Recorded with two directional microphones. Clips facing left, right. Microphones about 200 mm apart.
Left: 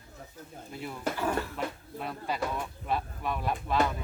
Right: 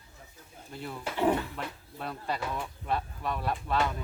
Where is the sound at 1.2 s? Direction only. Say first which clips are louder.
Right 6 dB; 20° right (ahead or behind).